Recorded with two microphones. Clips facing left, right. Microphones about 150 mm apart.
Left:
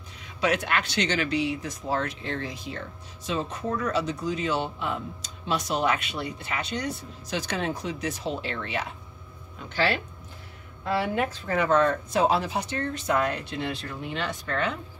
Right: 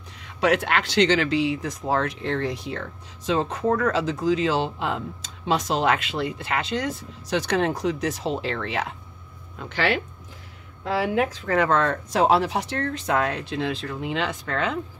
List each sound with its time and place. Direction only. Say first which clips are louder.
0.2 s speech: right 4 dB; 70° right (ahead or behind)
11.1 s speech: right 4 dB; 75° right (ahead or behind); by 14.8 s 90° right